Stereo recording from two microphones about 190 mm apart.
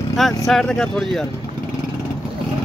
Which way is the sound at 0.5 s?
5° left (ahead or behind).